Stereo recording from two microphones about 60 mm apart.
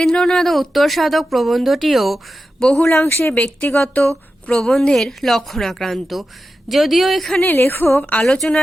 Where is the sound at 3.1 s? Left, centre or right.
Left.